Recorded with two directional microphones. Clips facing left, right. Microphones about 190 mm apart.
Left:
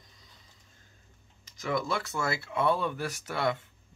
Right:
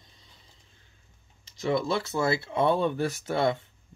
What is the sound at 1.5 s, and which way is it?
Speech, 30° right (ahead or behind).